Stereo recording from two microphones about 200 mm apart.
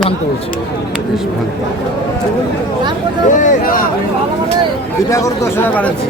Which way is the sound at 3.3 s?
40° left (ahead or behind).